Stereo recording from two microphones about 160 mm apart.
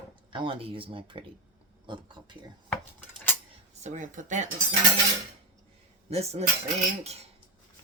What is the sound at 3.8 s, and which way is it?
Speech, 50° right (ahead or behind).